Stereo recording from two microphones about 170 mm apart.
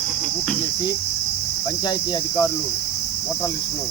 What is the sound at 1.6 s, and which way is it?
Cricket, 25° left (ahead or behind).